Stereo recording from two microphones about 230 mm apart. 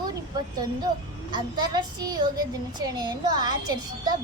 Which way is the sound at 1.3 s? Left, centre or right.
Centre.